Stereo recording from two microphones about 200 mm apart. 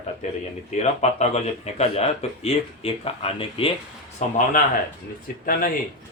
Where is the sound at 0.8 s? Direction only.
35° left (ahead or behind).